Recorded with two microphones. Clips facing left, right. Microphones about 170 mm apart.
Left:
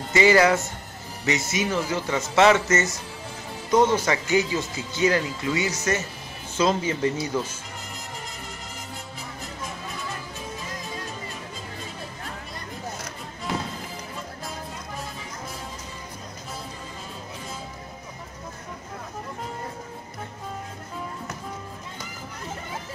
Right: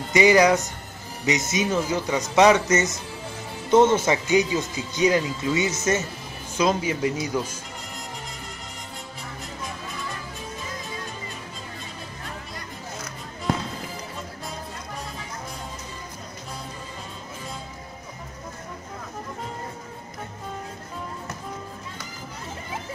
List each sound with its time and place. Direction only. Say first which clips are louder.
0.1 s speech: right 1 dB; 15° right (ahead or behind)